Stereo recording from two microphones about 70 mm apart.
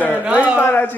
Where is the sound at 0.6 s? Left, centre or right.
Left.